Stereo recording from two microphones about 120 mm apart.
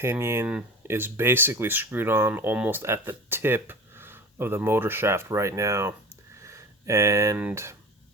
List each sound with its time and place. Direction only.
0.0 s speech: 20° right (ahead or behind)
6.4 s a sound: 25° right (ahead or behind)
7.5 s speech: 20° right (ahead or behind)